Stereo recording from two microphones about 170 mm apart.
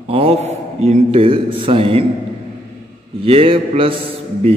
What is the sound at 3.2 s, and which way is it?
Speech, 35° right (ahead or behind).